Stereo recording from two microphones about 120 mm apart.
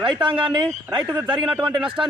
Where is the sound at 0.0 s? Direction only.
40° right (ahead or behind).